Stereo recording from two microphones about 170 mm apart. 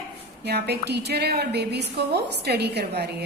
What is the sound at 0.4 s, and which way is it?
A woman's voice, 75° right (ahead or behind).